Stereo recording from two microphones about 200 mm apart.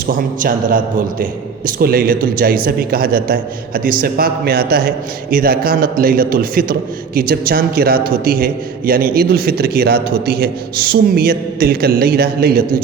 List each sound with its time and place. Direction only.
0.1 s a man's voice: 45° right (ahead or behind)